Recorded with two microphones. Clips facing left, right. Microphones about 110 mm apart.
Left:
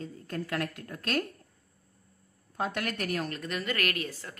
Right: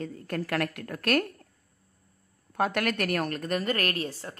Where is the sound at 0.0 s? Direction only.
70° right (ahead or behind).